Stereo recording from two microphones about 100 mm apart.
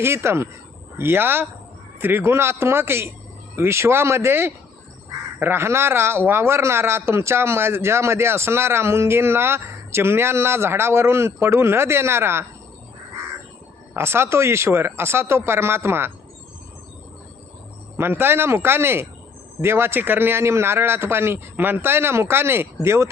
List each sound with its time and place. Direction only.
0.0 s speech: 25° right (ahead or behind)
13.9 s speech: 25° right (ahead or behind)
17.9 s speech: 20° right (ahead or behind)